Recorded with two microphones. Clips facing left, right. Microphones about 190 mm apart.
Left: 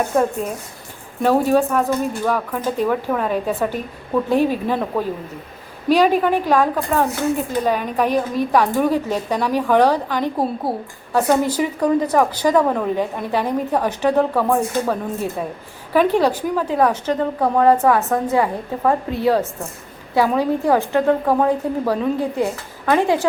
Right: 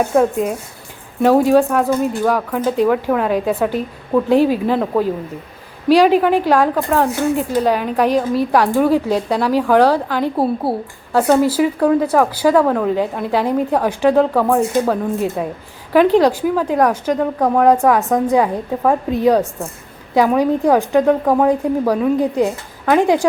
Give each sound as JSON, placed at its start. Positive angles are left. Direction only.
{"t": 1.2, "sound": "a woman's voice", "side_deg": -10}
{"t": 12.6, "sound": "a woman's voice", "side_deg": 5}
{"t": 13.0, "sound": "a woman's voice", "side_deg": -10}